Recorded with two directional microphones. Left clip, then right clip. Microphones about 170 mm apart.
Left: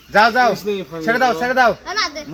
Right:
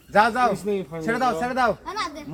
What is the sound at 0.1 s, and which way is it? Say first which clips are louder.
Speech: left 6 dB; 40° left (ahead or behind).